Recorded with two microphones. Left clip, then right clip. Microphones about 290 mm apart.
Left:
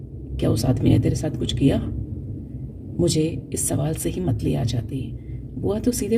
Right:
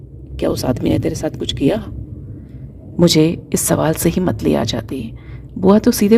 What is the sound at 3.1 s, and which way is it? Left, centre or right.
Speech, right.